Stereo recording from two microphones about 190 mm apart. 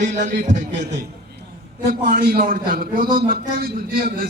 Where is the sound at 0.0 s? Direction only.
40° right (ahead or behind).